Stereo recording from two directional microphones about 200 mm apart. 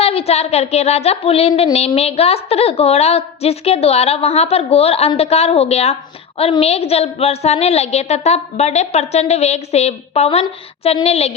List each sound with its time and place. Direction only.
0.0 s speech: 30° left (ahead or behind)